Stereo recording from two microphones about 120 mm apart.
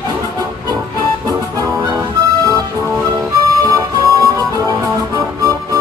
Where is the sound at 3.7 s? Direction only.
30° right (ahead or behind).